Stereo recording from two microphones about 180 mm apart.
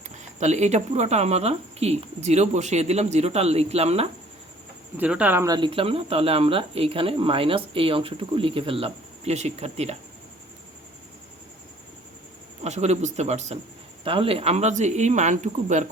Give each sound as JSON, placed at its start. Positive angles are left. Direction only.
{"t": 0.3, "sound": "speech", "side_deg": -40}
{"t": 4.9, "sound": "speech", "side_deg": -5}
{"t": 5.5, "sound": "speech", "side_deg": -30}
{"t": 12.6, "sound": "speech", "side_deg": -40}